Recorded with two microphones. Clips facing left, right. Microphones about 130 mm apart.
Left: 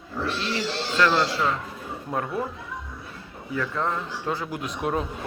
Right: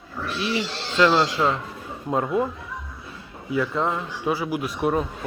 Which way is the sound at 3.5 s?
15° right (ahead or behind).